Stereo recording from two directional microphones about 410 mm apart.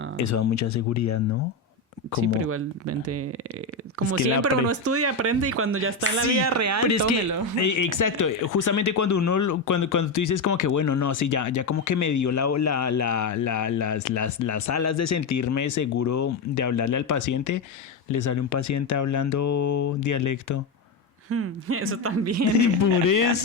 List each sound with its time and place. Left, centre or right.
0.2 s speech: left
2.1 s speech: right
4.6 s speech: right
7.6 s speech: left
21.2 s speech: right
22.5 s speech: left